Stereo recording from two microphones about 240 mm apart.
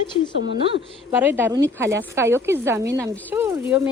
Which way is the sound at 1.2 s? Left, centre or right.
Centre.